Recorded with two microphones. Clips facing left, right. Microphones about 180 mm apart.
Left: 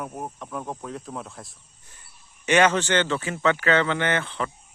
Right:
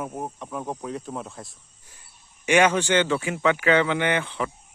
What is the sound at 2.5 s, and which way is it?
Speech, 10° right (ahead or behind).